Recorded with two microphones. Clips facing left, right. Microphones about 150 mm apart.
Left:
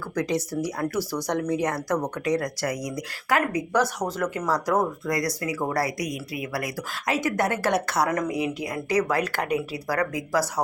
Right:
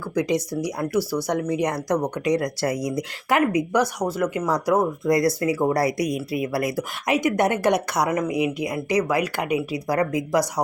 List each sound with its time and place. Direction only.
0.1 s speech: 15° right (ahead or behind)
5.0 s speech: 25° right (ahead or behind)
9.9 s speech: 20° right (ahead or behind)